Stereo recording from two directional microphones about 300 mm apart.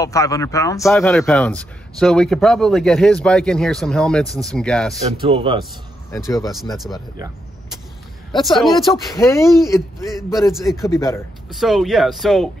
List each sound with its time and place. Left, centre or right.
0.0 s a man's voice: centre
5.3 s a man's voice: centre
6.1 s speech: centre
6.4 s a man's voice: centre
8.3 s a man's voice: centre
9.1 s speech: centre
10.8 s speech: centre
11.5 s a man's voice: centre